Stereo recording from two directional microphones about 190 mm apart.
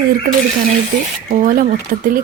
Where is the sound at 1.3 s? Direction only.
45° right (ahead or behind).